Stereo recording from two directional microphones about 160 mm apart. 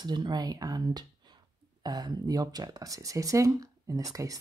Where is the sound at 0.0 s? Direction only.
25° right (ahead or behind).